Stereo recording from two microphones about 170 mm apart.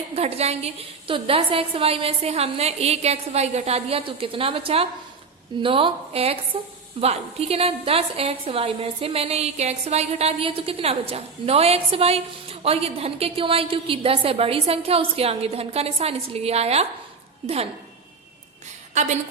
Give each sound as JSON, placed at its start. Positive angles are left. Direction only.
{"t": 0.1, "sound": "a woman's voice", "side_deg": -35}
{"t": 18.9, "sound": "a woman's voice", "side_deg": -45}